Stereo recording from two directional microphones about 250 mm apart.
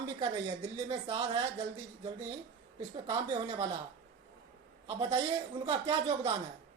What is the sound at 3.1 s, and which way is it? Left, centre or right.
Speech, centre.